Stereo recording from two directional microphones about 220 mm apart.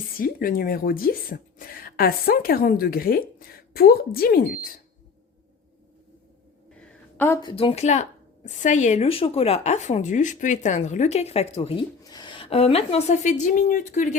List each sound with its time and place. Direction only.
0.2 s a woman's voice: 40° left (ahead or behind)
7.2 s speech: 10° left (ahead or behind)
7.5 s a woman's voice: 25° left (ahead or behind)